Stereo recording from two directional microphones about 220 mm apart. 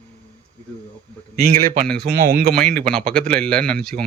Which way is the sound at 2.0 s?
45° right (ahead or behind).